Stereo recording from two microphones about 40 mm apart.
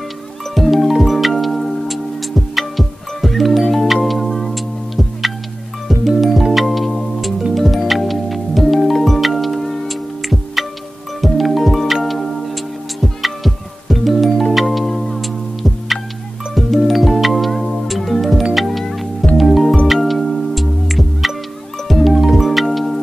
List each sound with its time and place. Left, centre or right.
0.6 s music: centre
11.1 s music: centre